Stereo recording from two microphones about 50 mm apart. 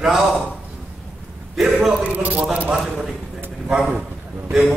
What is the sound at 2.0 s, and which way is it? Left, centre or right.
Speech, right.